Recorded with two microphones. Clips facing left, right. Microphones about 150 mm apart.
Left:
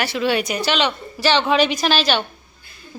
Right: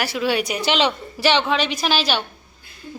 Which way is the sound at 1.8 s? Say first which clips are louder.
Left 2 dB; 10° right (ahead or behind).